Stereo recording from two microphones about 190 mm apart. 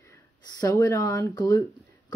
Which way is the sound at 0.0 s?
15° left (ahead or behind).